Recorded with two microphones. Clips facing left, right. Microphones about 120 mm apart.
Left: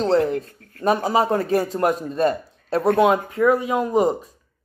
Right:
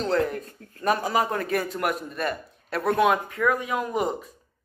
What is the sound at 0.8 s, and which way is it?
A man's voice, 20° left (ahead or behind).